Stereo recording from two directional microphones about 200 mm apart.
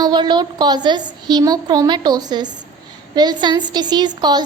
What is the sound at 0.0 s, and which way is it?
A woman's voice, 20° right (ahead or behind).